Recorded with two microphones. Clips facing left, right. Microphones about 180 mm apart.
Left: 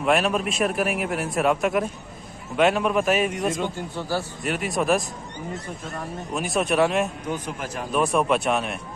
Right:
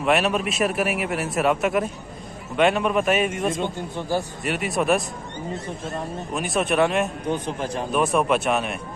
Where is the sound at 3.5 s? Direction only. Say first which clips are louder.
Right 1 dB; 20° right (ahead or behind).